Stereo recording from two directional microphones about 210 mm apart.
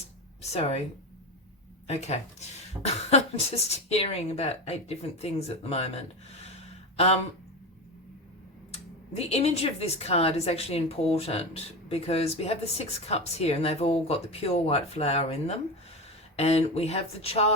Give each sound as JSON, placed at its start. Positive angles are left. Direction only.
{"t": 0.4, "sound": "speech", "side_deg": 30}
{"t": 1.9, "sound": "speech", "side_deg": 30}
{"t": 8.7, "sound": "speech", "side_deg": 30}